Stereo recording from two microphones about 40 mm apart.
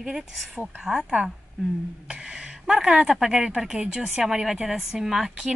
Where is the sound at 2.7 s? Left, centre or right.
Centre.